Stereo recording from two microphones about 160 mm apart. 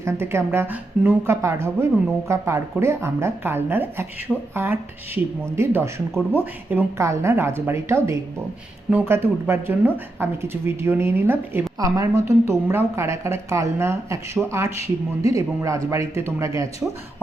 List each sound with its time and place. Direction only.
0.0 s a woman's voice: 15° right (ahead or behind)
14.4 s speech: centre (ahead or behind)
15.2 s speech: 20° right (ahead or behind)